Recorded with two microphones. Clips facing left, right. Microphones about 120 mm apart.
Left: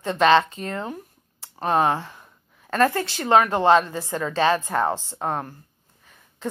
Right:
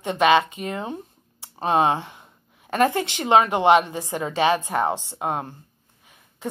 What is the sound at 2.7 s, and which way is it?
Speech, 15° right (ahead or behind).